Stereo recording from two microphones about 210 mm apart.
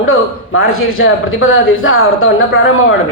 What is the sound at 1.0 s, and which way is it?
A woman's voice, 75° left (ahead or behind).